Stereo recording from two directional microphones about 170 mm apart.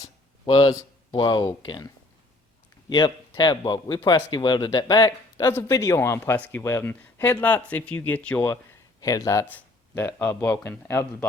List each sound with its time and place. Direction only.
0.4 s speech: 30° left (ahead or behind)
2.9 s speech: 25° left (ahead or behind); by 8.5 s 10° left (ahead or behind)
9.0 s speech: 20° left (ahead or behind)